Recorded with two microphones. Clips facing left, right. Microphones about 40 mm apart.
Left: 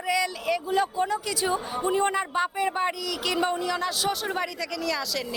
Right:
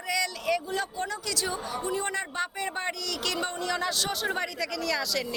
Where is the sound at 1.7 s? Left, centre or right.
Left.